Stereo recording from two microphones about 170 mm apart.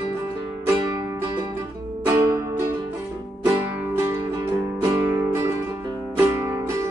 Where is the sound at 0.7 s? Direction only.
25° right (ahead or behind).